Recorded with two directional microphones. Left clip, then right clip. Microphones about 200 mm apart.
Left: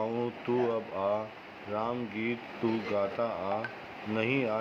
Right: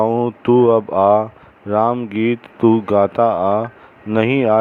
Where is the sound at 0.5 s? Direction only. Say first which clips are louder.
Right 19 dB; 45° right (ahead or behind).